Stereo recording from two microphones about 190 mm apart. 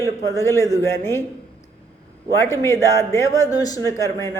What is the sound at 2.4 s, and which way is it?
Speech, 15° left (ahead or behind).